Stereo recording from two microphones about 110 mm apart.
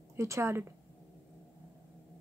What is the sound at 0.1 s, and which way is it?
Speech, 25° right (ahead or behind).